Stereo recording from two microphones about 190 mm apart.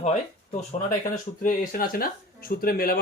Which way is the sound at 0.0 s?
40° left (ahead or behind).